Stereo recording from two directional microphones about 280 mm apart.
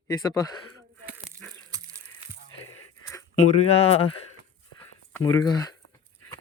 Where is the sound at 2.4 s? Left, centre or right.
Left.